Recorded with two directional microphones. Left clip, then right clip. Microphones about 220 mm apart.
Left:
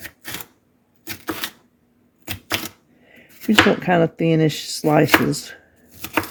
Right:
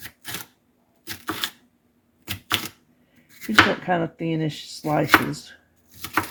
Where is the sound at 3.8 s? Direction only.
55° left (ahead or behind).